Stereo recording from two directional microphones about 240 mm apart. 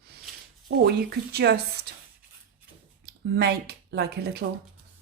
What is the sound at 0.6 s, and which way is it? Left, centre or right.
Speech, right.